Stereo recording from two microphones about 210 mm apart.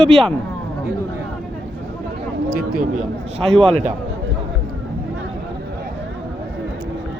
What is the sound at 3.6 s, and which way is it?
Speech, 30° right (ahead or behind).